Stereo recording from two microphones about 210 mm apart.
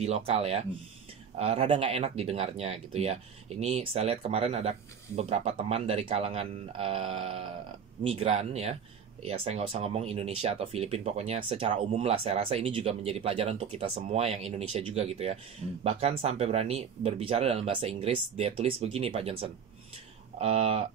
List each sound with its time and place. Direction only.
0.0 s speech: 30° right (ahead or behind)
20.3 s speech: 30° right (ahead or behind)